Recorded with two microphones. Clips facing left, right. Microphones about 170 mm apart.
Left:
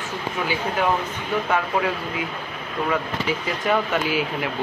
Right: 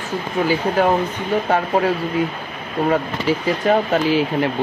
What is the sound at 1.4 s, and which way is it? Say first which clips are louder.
Speech: right 4 dB; 40° right (ahead or behind).